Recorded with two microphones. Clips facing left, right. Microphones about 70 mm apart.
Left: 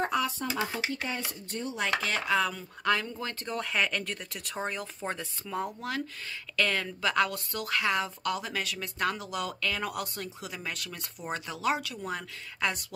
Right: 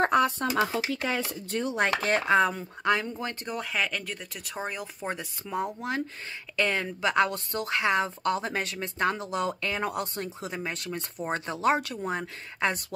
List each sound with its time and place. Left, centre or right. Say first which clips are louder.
0.0 s speech: right 6 dB; right
1.0 s speech: right 6 dB; right
1.8 s speech: right 4 dB; right
3.5 s a woman's voice: left 2 dB; centre; by 12.0 s right
12.0 s a woman's voice: right 4 dB; right